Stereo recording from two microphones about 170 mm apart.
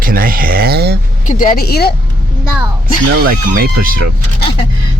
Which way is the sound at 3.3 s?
55° right (ahead or behind).